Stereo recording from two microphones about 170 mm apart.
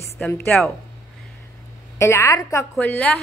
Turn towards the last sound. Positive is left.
turn(degrees=10)  # may be behind; listen again after turning